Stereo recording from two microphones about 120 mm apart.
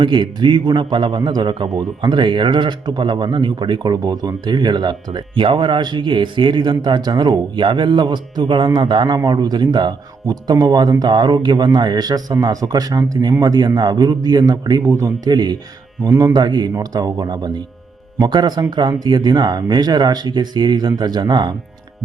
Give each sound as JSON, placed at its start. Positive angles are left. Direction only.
{"t": 0.0, "sound": "a man's voice", "side_deg": -40}